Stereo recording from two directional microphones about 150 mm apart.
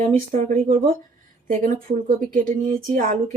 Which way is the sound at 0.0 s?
55° right (ahead or behind).